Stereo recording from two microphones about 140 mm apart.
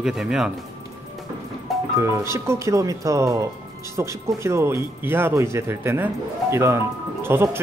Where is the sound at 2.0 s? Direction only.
20° right (ahead or behind).